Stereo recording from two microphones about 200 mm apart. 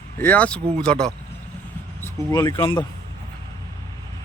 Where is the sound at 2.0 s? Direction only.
20° left (ahead or behind).